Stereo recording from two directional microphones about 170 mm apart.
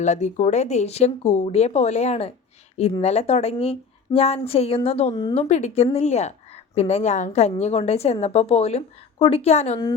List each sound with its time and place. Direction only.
0.0 s a woman's voice: 45° left (ahead or behind)